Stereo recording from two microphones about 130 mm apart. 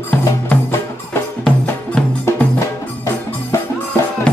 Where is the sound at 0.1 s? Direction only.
15° left (ahead or behind).